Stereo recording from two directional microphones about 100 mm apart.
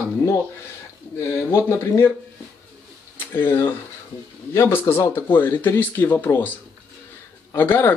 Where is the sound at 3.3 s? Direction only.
25° left (ahead or behind).